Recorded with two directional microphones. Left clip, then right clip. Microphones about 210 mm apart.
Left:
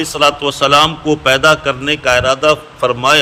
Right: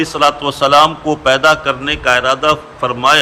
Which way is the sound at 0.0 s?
25° left (ahead or behind).